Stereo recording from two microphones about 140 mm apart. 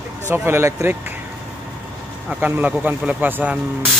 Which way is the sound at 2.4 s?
10° right (ahead or behind).